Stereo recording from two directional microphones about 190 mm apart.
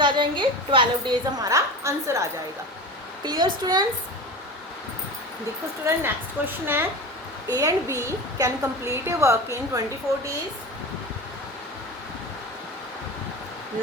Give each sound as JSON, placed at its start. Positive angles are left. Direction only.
{"t": 0.0, "sound": "a woman's voice", "side_deg": -25}
{"t": 5.8, "sound": "a woman's voice", "side_deg": -10}